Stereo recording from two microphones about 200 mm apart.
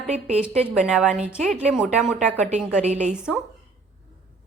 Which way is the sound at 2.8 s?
35° right (ahead or behind).